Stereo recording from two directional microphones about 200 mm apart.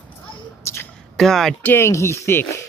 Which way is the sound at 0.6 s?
15° left (ahead or behind).